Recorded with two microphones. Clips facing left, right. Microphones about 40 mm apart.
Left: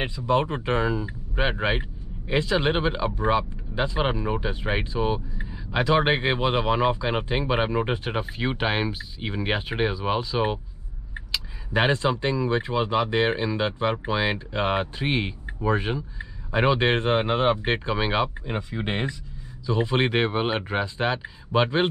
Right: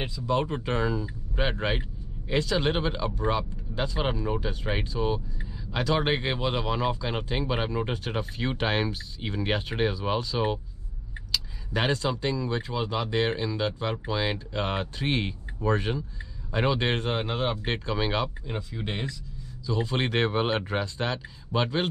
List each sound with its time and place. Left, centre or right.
0.0 s speech: left